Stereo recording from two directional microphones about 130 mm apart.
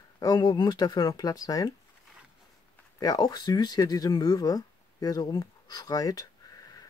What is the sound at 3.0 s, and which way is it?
Speech, 30° left (ahead or behind).